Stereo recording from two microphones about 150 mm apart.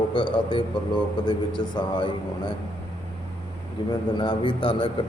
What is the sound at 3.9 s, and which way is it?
A man's voice, 30° left (ahead or behind).